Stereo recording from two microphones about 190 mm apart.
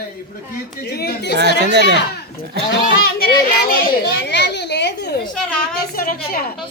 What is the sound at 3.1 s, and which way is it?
A child's voice, 50° left (ahead or behind).